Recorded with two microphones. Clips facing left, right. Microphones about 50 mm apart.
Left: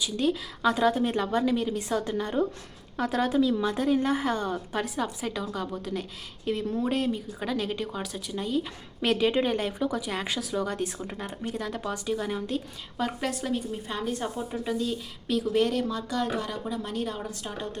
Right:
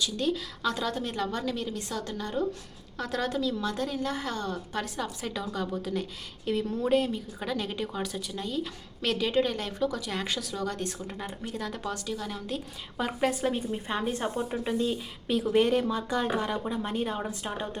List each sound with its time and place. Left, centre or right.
0.0 s a woman's voice: centre
12.0 s speech: centre
12.5 s a woman's voice: centre
13.1 s speech: centre
13.5 s speech: right